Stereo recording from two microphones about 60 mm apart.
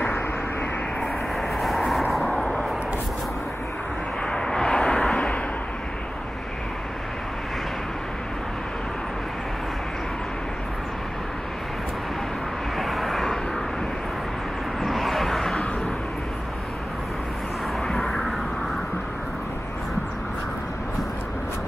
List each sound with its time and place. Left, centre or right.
1.6 s vehicle: centre
2.3 s vehicle: centre
4.3 s vehicle: centre
12.7 s vehicle: centre
14.8 s vehicle: centre
17.8 s vehicle: centre